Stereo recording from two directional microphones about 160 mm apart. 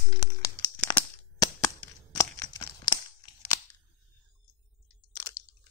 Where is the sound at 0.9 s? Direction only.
30° left (ahead or behind).